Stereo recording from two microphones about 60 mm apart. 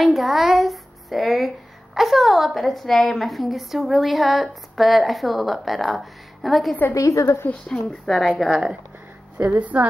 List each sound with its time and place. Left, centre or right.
0.0 s a woman's voice: centre
6.9 s a woman's voice: left
7.6 s a woman's voice: centre
8.4 s speech: centre
9.6 s a woman's voice: right